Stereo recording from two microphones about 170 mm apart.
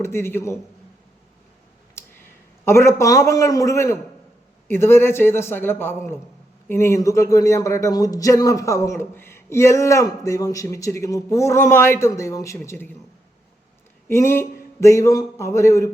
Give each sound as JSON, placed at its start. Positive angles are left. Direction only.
{"t": 0.0, "sound": "speech", "side_deg": 15}
{"t": 2.0, "sound": "a man's voice", "side_deg": 15}
{"t": 14.1, "sound": "speech", "side_deg": 15}